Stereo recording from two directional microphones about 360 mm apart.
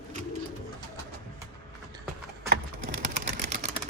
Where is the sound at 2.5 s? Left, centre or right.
Right.